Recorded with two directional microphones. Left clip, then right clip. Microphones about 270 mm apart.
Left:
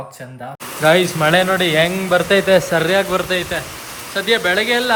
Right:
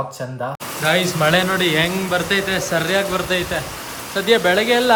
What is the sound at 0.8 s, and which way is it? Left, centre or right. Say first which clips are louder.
A man's voice: left 4 dB; centre.